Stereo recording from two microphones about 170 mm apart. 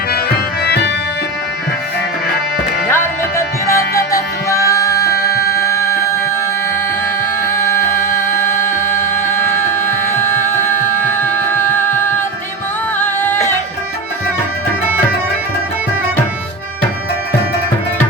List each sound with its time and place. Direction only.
0.1 s music: 70° left (ahead or behind)
2.9 s music: 15° left (ahead or behind)
7.4 s music: 15° left (ahead or behind)